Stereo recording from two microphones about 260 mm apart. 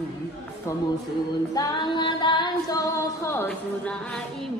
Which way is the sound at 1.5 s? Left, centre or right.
Centre.